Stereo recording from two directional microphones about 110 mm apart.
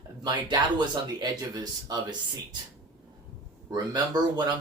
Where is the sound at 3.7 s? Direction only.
40° right (ahead or behind).